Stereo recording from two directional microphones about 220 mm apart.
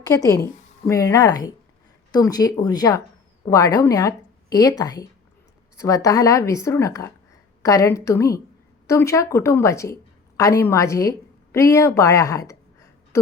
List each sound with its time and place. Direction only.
0.1 s a woman's voice: 15° left (ahead or behind)